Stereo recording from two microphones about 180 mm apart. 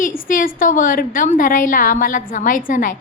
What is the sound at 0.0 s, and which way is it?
A woman's voice, 50° left (ahead or behind).